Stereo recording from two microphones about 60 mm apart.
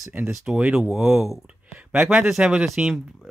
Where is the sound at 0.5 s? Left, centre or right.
Right.